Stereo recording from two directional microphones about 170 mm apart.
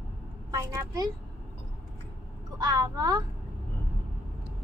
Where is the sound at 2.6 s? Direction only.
25° right (ahead or behind).